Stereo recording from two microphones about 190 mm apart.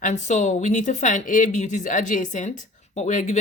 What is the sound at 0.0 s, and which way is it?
A woman's voice, 40° left (ahead or behind).